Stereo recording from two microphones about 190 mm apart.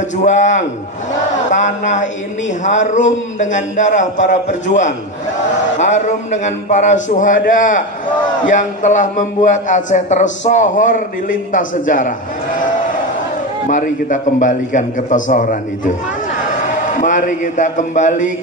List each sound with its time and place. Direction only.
0.2 s a man's voice: 40° left (ahead or behind)
13.7 s a man's voice: 40° left (ahead or behind)
16.9 s a man's voice: 40° left (ahead or behind)